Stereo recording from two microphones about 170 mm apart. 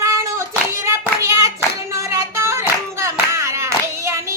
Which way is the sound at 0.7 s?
15° right (ahead or behind).